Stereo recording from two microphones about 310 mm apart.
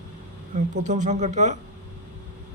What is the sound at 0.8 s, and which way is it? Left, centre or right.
Speech, right.